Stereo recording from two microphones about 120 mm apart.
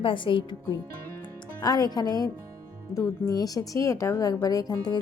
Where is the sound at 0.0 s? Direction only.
45° left (ahead or behind).